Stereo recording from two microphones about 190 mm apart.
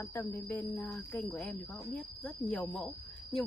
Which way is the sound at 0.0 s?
10° left (ahead or behind).